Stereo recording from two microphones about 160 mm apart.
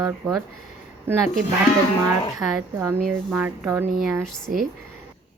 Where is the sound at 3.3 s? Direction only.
10° right (ahead or behind).